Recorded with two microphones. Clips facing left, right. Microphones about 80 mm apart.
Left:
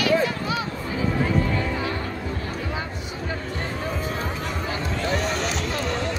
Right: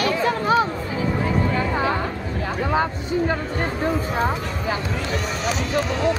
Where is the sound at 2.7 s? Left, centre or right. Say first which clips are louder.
Right 9 dB; right.